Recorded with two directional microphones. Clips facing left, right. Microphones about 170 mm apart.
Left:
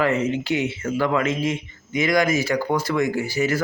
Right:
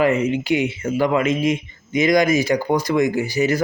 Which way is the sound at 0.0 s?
15° right (ahead or behind).